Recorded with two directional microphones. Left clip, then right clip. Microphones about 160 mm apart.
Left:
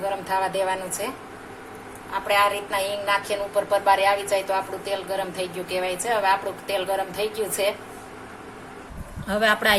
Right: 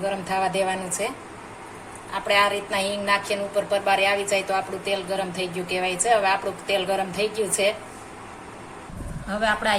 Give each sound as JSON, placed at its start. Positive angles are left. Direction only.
{"t": 0.3, "sound": "a woman's voice", "side_deg": 20}
{"t": 2.2, "sound": "a sound", "side_deg": 15}
{"t": 5.4, "sound": "a woman's voice", "side_deg": 20}
{"t": 9.3, "sound": "speech", "side_deg": 65}